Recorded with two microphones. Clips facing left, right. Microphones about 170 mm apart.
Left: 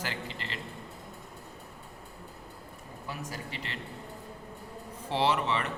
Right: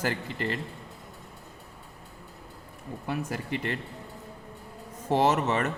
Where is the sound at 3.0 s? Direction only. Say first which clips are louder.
Right 7 dB; 60° right (ahead or behind).